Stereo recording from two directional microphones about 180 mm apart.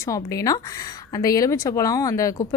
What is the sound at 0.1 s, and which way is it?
A woman's voice, 20° left (ahead or behind).